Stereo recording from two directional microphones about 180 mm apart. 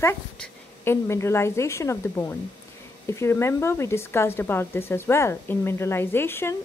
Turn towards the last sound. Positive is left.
turn(degrees=10)  # may be behind; listen again after turning